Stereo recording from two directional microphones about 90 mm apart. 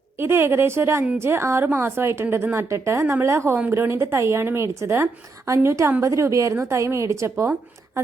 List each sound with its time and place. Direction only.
0.2 s a woman's voice: 30° right (ahead or behind)